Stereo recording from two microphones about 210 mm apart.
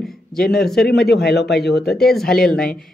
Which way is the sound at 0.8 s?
50° left (ahead or behind).